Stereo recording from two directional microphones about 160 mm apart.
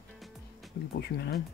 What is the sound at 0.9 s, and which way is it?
Speech, 80° left.